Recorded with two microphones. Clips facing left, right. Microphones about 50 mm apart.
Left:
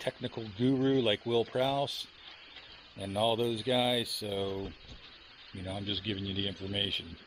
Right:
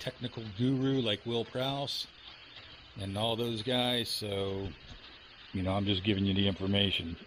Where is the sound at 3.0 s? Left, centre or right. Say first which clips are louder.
Left 4 dB; centre.